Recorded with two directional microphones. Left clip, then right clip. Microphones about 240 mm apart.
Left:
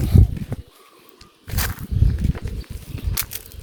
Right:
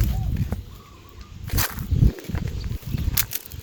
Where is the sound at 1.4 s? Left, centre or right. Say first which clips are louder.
Even; centre.